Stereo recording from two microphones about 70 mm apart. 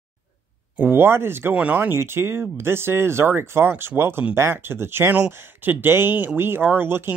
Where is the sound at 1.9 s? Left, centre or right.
Right.